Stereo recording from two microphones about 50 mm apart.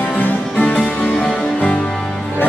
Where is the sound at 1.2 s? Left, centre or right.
Left.